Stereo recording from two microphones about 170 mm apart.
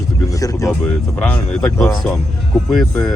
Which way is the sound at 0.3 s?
20° left (ahead or behind).